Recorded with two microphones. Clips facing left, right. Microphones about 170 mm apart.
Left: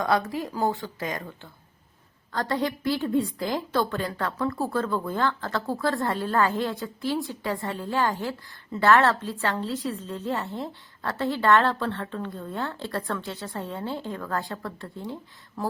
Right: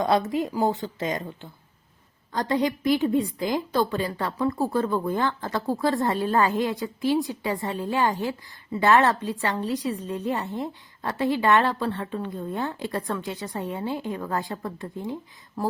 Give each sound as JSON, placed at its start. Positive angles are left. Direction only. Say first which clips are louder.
{"t": 0.0, "sound": "a woman's voice", "louder": "right 3 dB", "side_deg": -20}